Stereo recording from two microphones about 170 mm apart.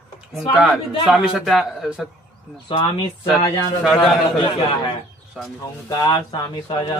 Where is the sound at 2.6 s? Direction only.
30° left (ahead or behind).